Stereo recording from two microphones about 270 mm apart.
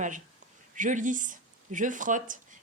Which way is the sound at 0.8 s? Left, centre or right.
Right.